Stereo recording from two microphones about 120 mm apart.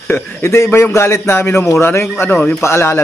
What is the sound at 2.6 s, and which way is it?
Speech, 20° left (ahead or behind).